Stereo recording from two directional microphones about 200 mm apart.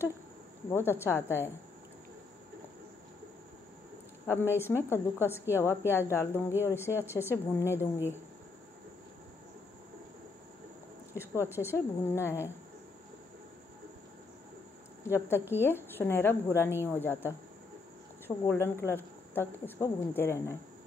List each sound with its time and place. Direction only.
0.7 s a woman's voice: 10° left (ahead or behind)
4.3 s a woman's voice: 10° left (ahead or behind)
11.4 s a woman's voice: 10° left (ahead or behind)
15.0 s a woman's voice: 10° left (ahead or behind)